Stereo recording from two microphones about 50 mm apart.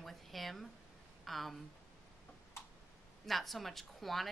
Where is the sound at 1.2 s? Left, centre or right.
Centre.